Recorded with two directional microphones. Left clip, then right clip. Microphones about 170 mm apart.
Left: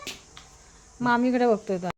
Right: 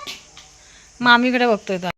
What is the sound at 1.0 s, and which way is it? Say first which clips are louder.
Speech: right 8 dB; 10° right (ahead or behind).